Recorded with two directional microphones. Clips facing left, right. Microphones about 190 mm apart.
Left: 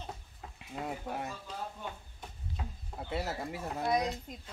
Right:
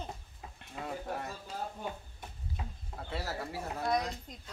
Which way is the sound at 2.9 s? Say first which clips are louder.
Left 2 dB; 20° left (ahead or behind).